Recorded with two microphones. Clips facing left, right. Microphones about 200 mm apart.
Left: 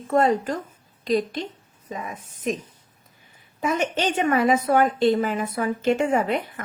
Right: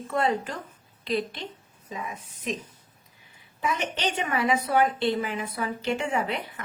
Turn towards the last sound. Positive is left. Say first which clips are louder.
# left 6 dB
turn(degrees=45)  # may be behind; listen again after turning